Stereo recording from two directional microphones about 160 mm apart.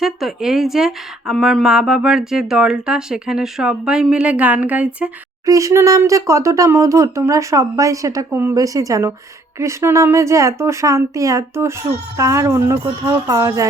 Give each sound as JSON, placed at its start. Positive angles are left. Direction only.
{"t": 0.0, "sound": "speech", "side_deg": 0}
{"t": 5.5, "sound": "speech", "side_deg": -20}